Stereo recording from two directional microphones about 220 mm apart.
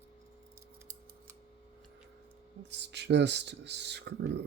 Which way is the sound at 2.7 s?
50° right (ahead or behind).